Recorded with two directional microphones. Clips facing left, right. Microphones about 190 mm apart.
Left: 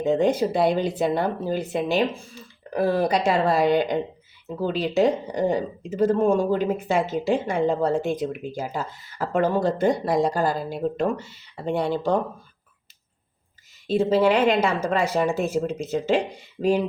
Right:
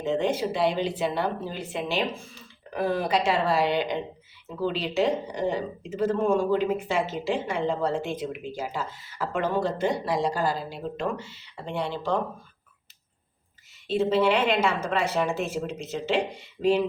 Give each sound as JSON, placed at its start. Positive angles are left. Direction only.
{"t": 0.0, "sound": "a woman's voice", "side_deg": 40}
{"t": 14.1, "sound": "speech", "side_deg": 40}